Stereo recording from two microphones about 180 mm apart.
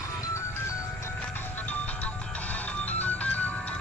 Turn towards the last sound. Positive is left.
turn(degrees=10)  # may be behind; listen again after turning